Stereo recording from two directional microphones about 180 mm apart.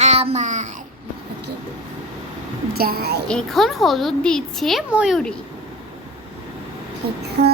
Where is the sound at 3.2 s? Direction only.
Centre (ahead or behind).